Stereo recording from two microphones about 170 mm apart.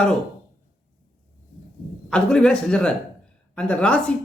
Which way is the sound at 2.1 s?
5° left (ahead or behind).